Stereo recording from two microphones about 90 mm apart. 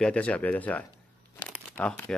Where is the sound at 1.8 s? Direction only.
15° left (ahead or behind).